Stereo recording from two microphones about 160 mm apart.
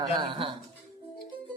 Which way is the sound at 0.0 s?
30° right (ahead or behind).